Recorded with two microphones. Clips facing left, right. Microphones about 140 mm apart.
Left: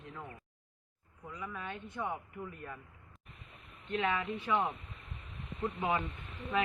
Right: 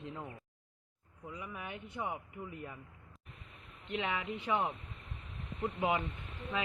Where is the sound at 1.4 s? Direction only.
15° right (ahead or behind).